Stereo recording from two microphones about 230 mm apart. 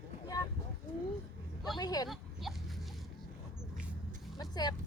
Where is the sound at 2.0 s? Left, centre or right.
Centre.